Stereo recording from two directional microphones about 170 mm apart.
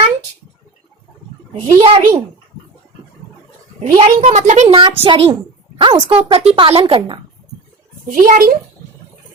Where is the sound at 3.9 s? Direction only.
40° right (ahead or behind).